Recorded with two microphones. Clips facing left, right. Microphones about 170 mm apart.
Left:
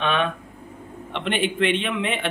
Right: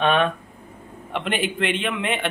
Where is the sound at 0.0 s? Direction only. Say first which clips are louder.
Right 4 dB; 50° right (ahead or behind).